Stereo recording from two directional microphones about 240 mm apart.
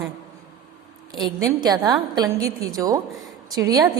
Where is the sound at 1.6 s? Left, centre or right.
Centre.